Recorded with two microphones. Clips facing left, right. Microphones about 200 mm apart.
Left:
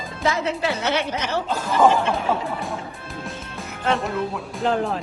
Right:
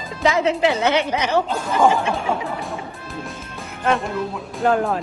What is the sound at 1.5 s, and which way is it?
Speech, centre (ahead or behind).